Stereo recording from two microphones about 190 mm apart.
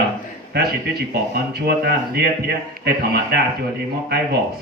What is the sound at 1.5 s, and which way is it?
A man's voice, 55° right (ahead or behind).